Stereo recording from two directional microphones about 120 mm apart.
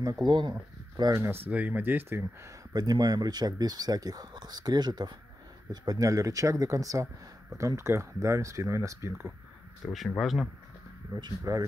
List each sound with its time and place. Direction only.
0.0 s speech: 35° right (ahead or behind)
1.5 s speech: 15° right (ahead or behind)
2.7 s speech: 35° right (ahead or behind)
9.9 s speech: centre (ahead or behind)
11.1 s speech: 35° right (ahead or behind)